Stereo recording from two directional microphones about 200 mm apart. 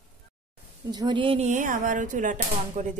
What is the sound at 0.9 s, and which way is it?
Speech, 20° right (ahead or behind).